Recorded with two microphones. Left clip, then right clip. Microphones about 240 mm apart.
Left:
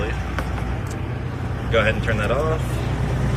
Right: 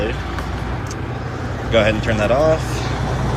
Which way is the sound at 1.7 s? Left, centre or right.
Centre.